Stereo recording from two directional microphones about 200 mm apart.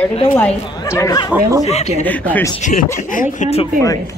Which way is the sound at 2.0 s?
10° left (ahead or behind).